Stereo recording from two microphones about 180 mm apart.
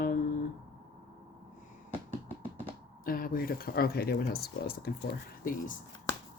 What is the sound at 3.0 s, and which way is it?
Speech, 50° left (ahead or behind).